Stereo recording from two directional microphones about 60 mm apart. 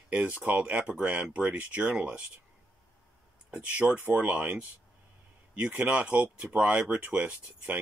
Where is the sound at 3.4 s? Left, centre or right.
Centre.